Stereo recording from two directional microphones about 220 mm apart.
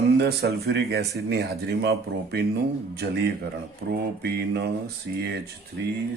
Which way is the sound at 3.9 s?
45° right (ahead or behind).